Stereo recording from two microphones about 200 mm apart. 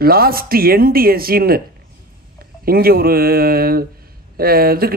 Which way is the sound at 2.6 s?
50° right (ahead or behind).